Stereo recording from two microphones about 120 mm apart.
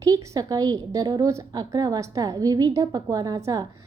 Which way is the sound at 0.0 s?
30° right (ahead or behind).